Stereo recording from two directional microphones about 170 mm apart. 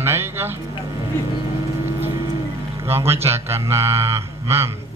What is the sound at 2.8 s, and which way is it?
Speech, 15° right (ahead or behind).